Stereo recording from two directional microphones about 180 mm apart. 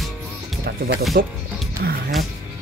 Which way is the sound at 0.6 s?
60° right (ahead or behind).